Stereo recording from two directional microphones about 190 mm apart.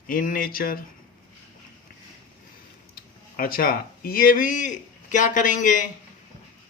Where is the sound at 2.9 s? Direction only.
50° left (ahead or behind).